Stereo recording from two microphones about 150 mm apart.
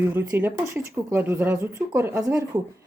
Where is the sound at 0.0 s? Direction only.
15° right (ahead or behind).